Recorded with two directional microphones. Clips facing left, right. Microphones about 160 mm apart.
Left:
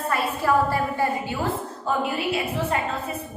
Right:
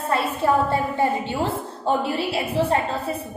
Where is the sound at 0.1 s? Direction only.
25° right (ahead or behind).